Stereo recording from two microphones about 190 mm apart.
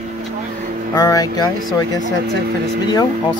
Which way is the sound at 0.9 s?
20° left (ahead or behind).